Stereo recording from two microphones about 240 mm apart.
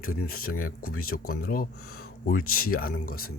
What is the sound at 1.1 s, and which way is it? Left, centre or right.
Speech, left.